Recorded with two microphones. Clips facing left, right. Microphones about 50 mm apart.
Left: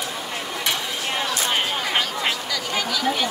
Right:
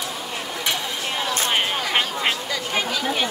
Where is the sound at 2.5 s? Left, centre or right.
Right.